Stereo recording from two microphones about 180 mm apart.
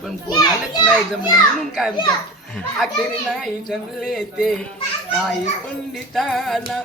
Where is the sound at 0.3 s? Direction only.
20° left (ahead or behind).